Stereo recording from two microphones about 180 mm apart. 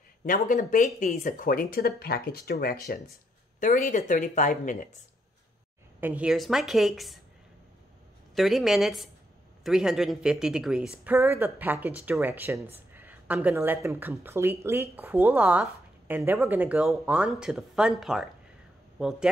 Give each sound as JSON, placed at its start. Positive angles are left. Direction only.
{"t": 0.2, "sound": "speech", "side_deg": 50}
{"t": 3.5, "sound": "speech", "side_deg": 45}
{"t": 5.9, "sound": "speech", "side_deg": -10}
{"t": 8.4, "sound": "speech", "side_deg": 0}